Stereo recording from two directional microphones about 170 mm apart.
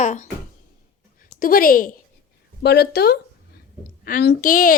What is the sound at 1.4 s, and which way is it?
Speech, 60° left (ahead or behind).